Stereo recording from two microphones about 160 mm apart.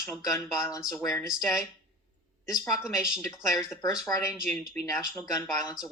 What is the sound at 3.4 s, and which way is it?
Speech, 20° left (ahead or behind).